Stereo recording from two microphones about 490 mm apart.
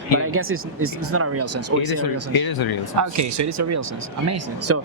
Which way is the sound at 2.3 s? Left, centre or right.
Left.